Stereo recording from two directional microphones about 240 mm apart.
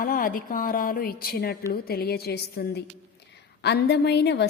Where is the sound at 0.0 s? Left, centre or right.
Left.